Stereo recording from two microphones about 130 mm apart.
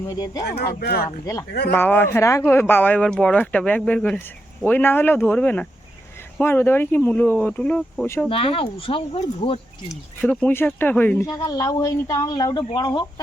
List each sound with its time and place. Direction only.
0.0 s speech: 25° left (ahead or behind); by 8.0 s 10° left (ahead or behind)
8.0 s speech: 20° left (ahead or behind)
8.3 s speech: 45° left (ahead or behind)
10.2 s speech: 10° left (ahead or behind)
11.3 s speech: 30° left (ahead or behind)